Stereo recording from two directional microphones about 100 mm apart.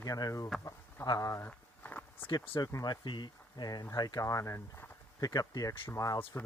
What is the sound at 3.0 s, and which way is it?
Speech, 50° left (ahead or behind).